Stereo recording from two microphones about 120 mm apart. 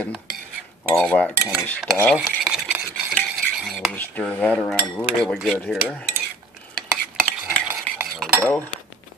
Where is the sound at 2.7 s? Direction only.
10° right (ahead or behind).